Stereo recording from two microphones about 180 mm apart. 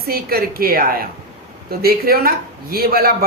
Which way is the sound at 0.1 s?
55° right (ahead or behind).